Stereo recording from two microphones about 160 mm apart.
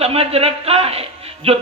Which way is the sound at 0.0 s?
40° right (ahead or behind).